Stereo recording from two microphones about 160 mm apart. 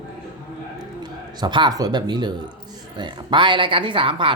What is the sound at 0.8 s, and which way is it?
A woman's voice, 25° right (ahead or behind).